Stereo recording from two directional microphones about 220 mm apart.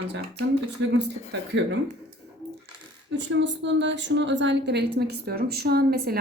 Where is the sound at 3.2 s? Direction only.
55° right (ahead or behind).